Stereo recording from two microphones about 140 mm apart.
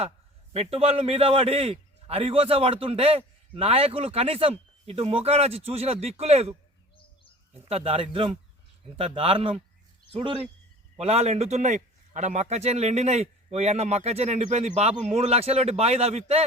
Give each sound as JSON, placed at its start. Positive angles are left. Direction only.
{"t": 0.5, "sound": "a man's voice", "side_deg": -45}
{"t": 7.5, "sound": "a man's voice", "side_deg": -45}
{"t": 10.9, "sound": "a man's voice", "side_deg": -50}